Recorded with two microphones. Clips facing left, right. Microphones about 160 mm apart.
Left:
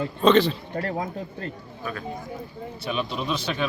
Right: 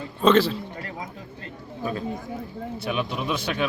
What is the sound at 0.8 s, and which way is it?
Speech, 50° left (ahead or behind).